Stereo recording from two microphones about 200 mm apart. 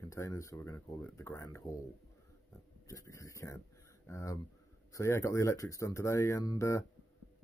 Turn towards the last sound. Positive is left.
turn(degrees=15)  # may be behind; listen again after turning